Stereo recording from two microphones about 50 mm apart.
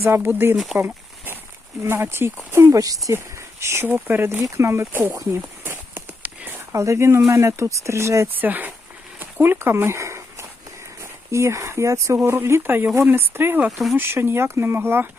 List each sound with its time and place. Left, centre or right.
0.0 s speech: right
0.5 s speech: centre
1.8 s speech: right
2.5 s speech: right
3.8 s speech: right
5.6 s horse: right
6.2 s a sound: right
6.7 s speech: right
7.3 s speech: right
8.4 s speech: right
9.4 s speech: right
12.6 s speech: right
13.7 s speech: centre
13.9 s speech: right